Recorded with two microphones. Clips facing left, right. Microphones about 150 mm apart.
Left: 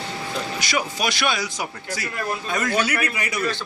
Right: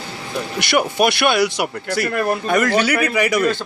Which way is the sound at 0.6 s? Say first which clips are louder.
Right 10 dB; 65° right (ahead or behind).